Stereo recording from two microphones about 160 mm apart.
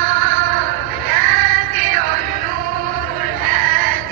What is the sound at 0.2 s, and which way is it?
Music, 60° right (ahead or behind).